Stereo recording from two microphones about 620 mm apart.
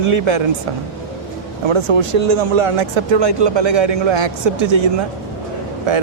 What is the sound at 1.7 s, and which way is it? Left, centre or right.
Speech, right.